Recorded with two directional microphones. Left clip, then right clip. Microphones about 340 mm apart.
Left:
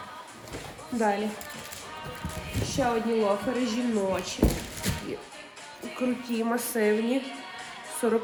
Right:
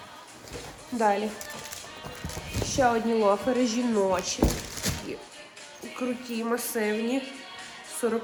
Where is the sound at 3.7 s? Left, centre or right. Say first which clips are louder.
Right 3 dB; centre.